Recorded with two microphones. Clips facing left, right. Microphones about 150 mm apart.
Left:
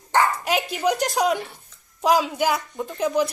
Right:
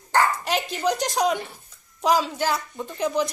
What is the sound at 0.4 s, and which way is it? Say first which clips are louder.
A woman's voice: left 2 dB; centre (ahead or behind).